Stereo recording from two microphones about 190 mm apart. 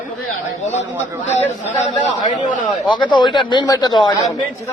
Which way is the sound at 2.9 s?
25° left (ahead or behind).